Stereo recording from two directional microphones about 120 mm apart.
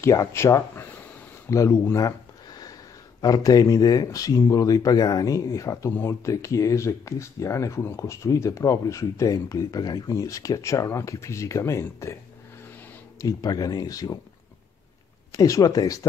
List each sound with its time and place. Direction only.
0.0 s speech: 25° left (ahead or behind)
1.5 s a sound: 25° left (ahead or behind)
3.2 s speech: 30° left (ahead or behind)
13.2 s speech: 30° left (ahead or behind)
15.3 s speech: 30° left (ahead or behind)